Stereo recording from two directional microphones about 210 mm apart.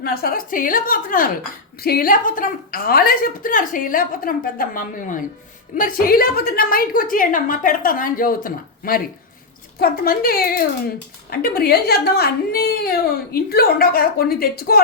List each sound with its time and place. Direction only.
0.0 s a woman's voice: 45° left (ahead or behind)